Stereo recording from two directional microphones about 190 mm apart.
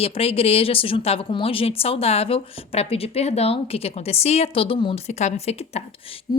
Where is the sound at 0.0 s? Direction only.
30° left (ahead or behind).